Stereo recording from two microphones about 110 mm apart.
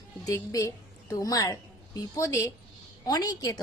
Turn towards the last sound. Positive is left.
turn(degrees=35)  # may be behind; listen again after turning